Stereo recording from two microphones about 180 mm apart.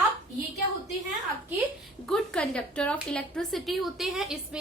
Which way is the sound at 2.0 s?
5° left (ahead or behind).